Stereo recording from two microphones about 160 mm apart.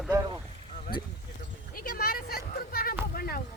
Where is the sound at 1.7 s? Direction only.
65° left (ahead or behind).